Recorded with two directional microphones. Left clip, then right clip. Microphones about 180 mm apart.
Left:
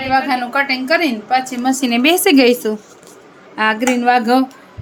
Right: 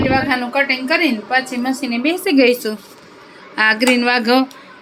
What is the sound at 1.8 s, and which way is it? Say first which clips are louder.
Speech: left 9 dB; 50° left (ahead or behind).